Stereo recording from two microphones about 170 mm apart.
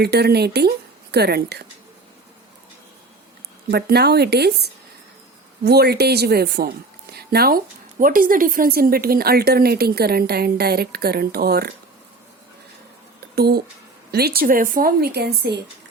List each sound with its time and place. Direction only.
0.0 s a woman's voice: 70° right (ahead or behind)
3.7 s a woman's voice: 70° right (ahead or behind)
13.3 s a woman's voice: 70° right (ahead or behind)